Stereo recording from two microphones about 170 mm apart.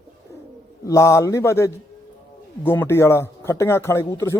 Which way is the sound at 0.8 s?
20° left (ahead or behind).